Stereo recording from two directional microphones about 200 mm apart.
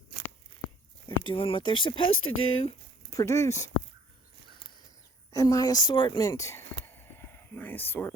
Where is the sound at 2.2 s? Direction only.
90° left.